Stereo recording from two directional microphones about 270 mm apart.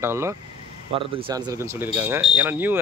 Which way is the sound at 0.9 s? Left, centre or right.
Centre.